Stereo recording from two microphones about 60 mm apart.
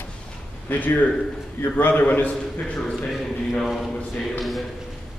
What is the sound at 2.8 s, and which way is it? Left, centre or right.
A man's voice, centre.